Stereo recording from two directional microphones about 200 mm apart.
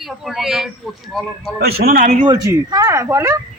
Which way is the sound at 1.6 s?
50° right (ahead or behind).